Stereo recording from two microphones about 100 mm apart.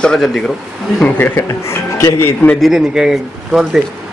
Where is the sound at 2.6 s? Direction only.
5° right (ahead or behind).